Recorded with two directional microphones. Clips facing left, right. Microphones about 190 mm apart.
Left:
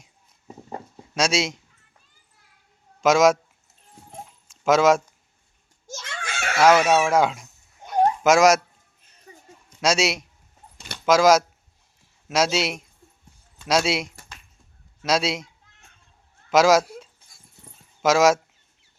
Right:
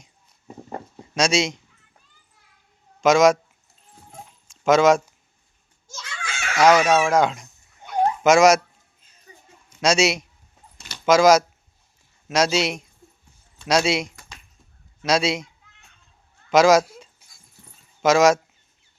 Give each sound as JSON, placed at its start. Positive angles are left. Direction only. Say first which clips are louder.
{"t": 1.0, "sound": "speech", "louder": "right 2 dB", "side_deg": 5}
{"t": 3.0, "sound": "speech", "louder": "right 1 dB", "side_deg": 5}
{"t": 4.4, "sound": "a sound", "louder": "right 2 dB", "side_deg": 5}
{"t": 6.1, "sound": "a sound", "louder": "left 2 dB", "side_deg": 50}
{"t": 6.6, "sound": "speech", "louder": "right 1 dB", "side_deg": 5}
{"t": 9.6, "sound": "speech", "louder": "right 2 dB", "side_deg": 0}
{"t": 16.5, "sound": "speech", "louder": "right 2 dB", "side_deg": 5}